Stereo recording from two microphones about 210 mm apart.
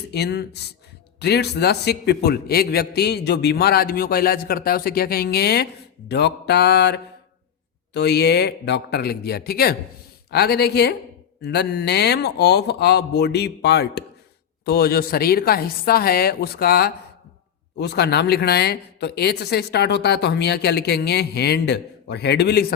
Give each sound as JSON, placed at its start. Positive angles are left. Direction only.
{"t": 0.1, "sound": "speech", "side_deg": 50}